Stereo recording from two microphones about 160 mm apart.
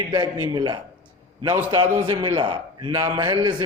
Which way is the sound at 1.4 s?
15° right (ahead or behind).